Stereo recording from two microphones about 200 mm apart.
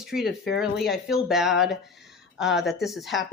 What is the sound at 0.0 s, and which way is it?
A woman's voice, centre (ahead or behind).